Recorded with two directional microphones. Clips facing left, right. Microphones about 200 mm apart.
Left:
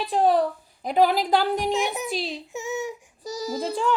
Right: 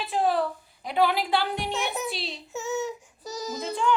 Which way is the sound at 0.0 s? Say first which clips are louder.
Left 4 dB; 35° left (ahead or behind).